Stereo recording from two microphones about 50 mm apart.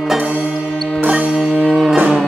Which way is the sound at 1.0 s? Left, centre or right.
Right.